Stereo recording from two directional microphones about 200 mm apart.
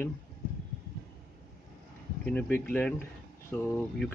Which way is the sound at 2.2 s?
5° left (ahead or behind).